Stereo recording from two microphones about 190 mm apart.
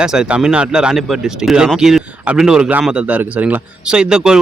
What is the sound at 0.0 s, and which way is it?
Speech, 5° right (ahead or behind).